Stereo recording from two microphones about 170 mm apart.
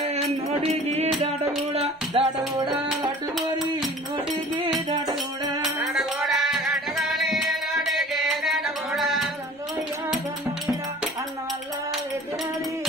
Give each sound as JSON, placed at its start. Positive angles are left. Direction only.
{"t": 0.8, "sound": "music", "side_deg": -40}
{"t": 2.1, "sound": "music", "side_deg": -25}
{"t": 5.6, "sound": "music", "side_deg": 0}